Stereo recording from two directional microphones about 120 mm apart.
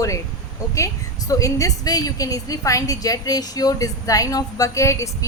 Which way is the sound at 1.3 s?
25° left (ahead or behind).